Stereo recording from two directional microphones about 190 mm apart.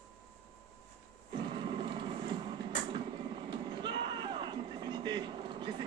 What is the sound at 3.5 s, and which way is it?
Vehicle, 25° right (ahead or behind).